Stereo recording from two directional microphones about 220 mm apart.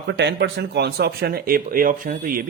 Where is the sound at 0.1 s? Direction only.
50° right (ahead or behind).